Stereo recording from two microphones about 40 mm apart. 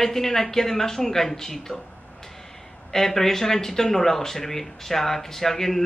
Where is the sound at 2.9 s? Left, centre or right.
Centre.